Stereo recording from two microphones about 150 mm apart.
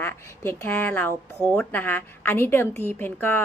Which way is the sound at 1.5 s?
10° left (ahead or behind).